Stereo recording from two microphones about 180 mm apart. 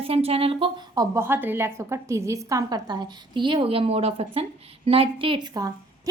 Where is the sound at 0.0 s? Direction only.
35° right (ahead or behind).